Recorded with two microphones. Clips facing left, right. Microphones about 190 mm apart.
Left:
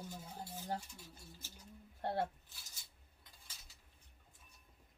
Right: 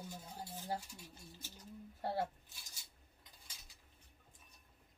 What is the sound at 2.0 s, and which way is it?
Speech, 5° right (ahead or behind).